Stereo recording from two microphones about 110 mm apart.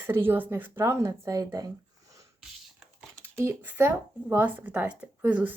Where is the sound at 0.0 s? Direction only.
20° right (ahead or behind).